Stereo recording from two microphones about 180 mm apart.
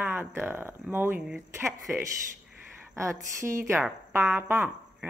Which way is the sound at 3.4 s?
15° right (ahead or behind).